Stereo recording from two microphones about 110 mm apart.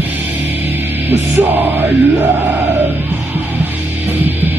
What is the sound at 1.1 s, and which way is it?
Music, 20° right (ahead or behind).